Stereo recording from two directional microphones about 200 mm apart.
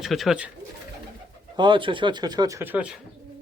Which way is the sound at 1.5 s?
25° right (ahead or behind).